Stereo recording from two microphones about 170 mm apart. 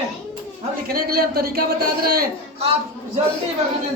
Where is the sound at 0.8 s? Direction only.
60° right (ahead or behind).